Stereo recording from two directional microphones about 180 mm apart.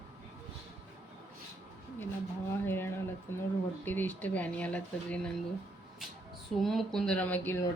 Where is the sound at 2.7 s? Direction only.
10° left (ahead or behind).